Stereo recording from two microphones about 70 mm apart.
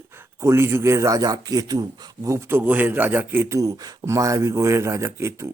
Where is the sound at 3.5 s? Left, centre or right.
Right.